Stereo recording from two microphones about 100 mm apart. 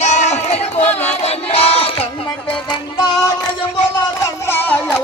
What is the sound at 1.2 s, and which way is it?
Battle cry, 85° left.